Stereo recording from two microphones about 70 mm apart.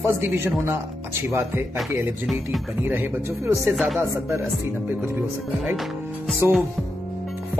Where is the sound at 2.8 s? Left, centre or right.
Right.